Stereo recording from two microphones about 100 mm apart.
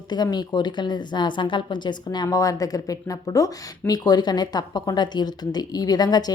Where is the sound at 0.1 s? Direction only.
45° left (ahead or behind).